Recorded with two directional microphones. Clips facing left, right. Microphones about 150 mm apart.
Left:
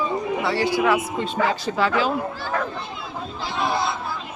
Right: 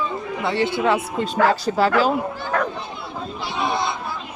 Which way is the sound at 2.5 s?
70° right (ahead or behind).